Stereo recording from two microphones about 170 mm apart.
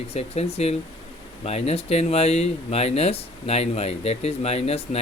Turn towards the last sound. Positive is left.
turn(degrees=40)  # may be behind; listen again after turning